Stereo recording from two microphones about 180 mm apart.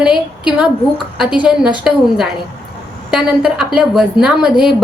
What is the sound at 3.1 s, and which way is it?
A woman's voice, 5° right (ahead or behind).